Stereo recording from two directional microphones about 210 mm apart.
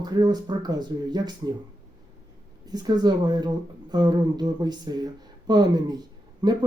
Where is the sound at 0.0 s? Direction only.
20° right (ahead or behind).